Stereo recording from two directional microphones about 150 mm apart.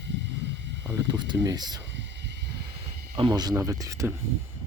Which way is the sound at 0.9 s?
25° right (ahead or behind).